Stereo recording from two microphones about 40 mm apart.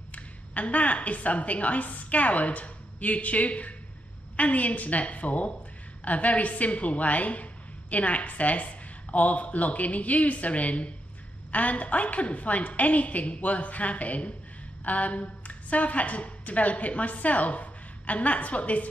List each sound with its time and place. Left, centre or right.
0.1 s a woman's voice: left